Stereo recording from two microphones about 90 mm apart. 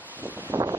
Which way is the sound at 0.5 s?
25° right (ahead or behind).